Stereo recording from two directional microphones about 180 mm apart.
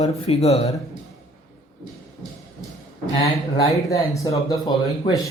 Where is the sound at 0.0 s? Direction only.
35° left (ahead or behind).